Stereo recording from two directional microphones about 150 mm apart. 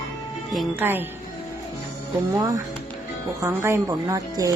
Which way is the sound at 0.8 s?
15° right (ahead or behind).